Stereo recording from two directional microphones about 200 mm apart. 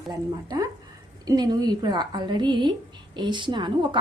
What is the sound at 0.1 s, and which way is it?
A woman's voice, 20° right (ahead or behind).